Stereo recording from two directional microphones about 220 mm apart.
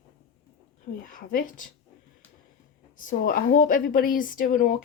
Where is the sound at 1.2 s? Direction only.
40° left (ahead or behind).